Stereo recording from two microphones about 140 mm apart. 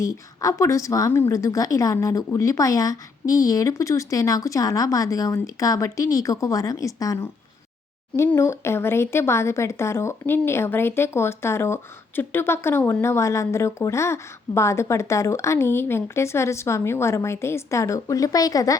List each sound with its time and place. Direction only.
0.0 s speech: 25° left (ahead or behind)